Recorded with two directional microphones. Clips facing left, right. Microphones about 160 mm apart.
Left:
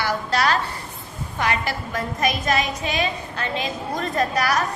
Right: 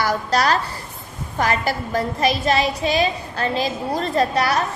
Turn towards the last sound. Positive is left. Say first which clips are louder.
# right 3 dB
turn(degrees=-30)  # may be behind; listen again after turning